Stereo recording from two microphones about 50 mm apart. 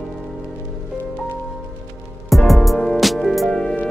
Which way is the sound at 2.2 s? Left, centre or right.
Centre.